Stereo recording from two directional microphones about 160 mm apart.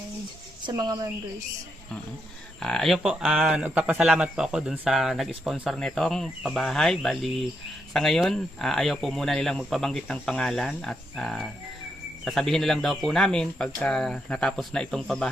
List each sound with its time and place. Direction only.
0.6 s a woman's voice: 25° right (ahead or behind)
2.6 s speech: 5° left (ahead or behind)